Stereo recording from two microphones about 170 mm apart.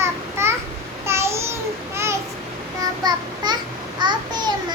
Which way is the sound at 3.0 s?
25° right (ahead or behind).